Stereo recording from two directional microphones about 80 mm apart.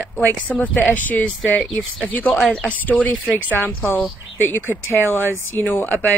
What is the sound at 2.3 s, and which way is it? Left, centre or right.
Speech, centre.